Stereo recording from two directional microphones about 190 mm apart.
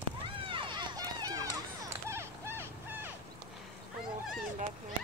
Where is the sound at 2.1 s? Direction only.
15° right (ahead or behind).